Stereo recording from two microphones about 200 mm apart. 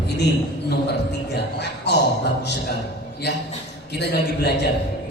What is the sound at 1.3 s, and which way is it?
Speech, 55° left (ahead or behind).